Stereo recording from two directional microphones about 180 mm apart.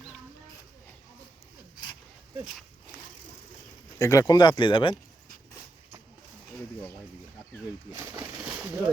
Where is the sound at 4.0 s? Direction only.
15° left (ahead or behind).